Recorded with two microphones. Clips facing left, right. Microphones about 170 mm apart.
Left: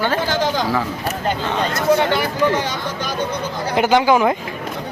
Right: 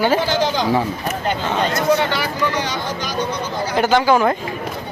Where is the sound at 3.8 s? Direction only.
15° left (ahead or behind).